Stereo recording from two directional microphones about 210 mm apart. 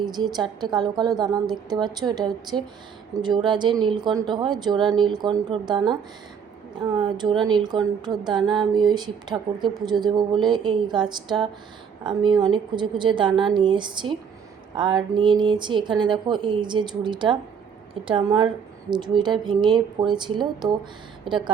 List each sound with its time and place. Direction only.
0.0 s a woman's voice: 20° right (ahead or behind)
7.4 s a woman's voice: 20° right (ahead or behind)